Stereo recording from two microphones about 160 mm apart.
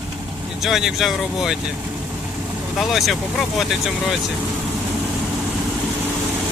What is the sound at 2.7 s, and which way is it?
Speech, centre (ahead or behind).